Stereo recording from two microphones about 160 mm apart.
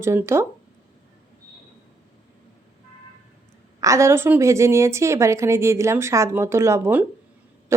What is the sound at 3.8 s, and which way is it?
A woman's voice, 20° right (ahead or behind).